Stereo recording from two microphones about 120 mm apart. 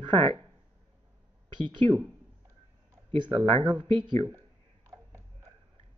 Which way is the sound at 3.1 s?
45° right (ahead or behind).